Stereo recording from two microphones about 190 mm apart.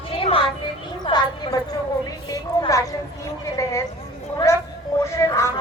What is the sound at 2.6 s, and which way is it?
Speech, 20° left (ahead or behind).